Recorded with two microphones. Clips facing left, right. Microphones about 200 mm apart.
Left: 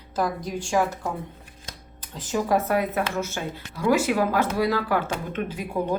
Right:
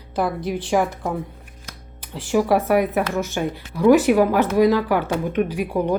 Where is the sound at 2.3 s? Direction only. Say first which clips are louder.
Right 5 dB; 15° right (ahead or behind).